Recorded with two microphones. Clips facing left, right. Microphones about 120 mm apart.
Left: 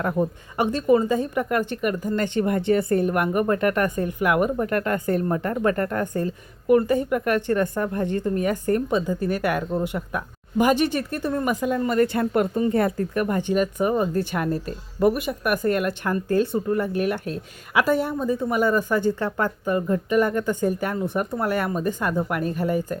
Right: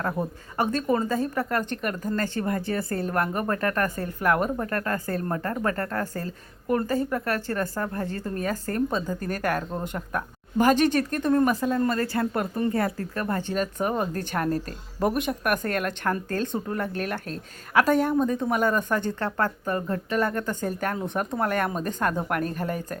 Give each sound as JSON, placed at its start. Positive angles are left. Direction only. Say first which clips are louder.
{"t": 0.0, "sound": "speech", "louder": "left 5 dB", "side_deg": 15}
{"t": 2.1, "sound": "speech", "louder": "left 4 dB", "side_deg": 20}
{"t": 14.2, "sound": "speech", "louder": "left 4 dB", "side_deg": -50}
{"t": 14.9, "sound": "speech", "louder": "left 4 dB", "side_deg": 5}